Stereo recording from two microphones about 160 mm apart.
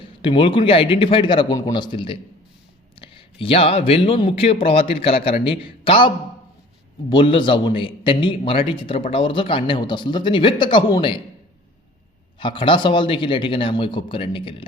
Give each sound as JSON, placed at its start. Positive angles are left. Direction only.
{"t": 0.0, "sound": "a man's voice", "side_deg": 30}
{"t": 7.1, "sound": "a man's voice", "side_deg": 30}
{"t": 12.4, "sound": "a man's voice", "side_deg": 30}